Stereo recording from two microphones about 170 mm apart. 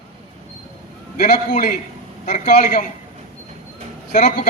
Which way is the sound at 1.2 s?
60° left (ahead or behind).